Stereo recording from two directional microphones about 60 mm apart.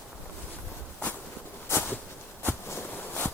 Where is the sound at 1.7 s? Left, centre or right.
Left.